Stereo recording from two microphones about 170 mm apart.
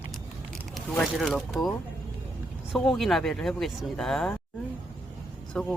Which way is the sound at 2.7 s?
Centre (ahead or behind).